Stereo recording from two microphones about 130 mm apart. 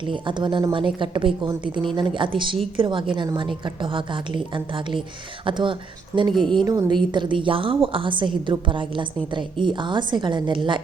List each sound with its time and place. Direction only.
0.0 s a woman's voice: 40° right (ahead or behind)
6.3 s a woman's voice: centre (ahead or behind)
6.7 s a woman's voice: 30° right (ahead or behind)